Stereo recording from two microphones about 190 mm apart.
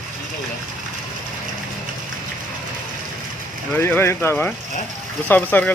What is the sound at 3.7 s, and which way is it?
Speech, 10° left (ahead or behind).